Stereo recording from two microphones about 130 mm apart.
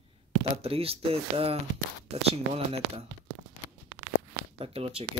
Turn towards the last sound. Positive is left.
turn(degrees=-50)  # may be behind; listen again after turning